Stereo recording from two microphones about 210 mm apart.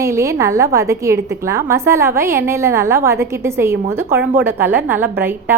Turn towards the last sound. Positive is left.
turn(degrees=-10)  # may be behind; listen again after turning